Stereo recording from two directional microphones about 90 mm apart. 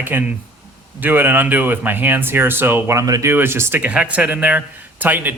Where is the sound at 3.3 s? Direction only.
25° right (ahead or behind).